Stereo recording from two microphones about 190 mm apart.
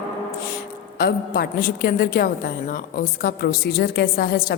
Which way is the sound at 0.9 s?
55° left (ahead or behind).